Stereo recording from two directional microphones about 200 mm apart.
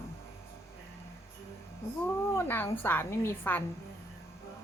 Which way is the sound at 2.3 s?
10° left (ahead or behind).